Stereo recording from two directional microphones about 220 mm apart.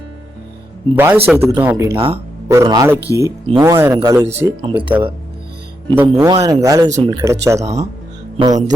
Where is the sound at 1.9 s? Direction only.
25° right (ahead or behind).